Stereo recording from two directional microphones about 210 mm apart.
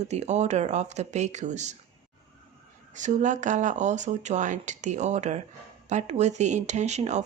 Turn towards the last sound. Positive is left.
turn(degrees=-35)  # may be behind; listen again after turning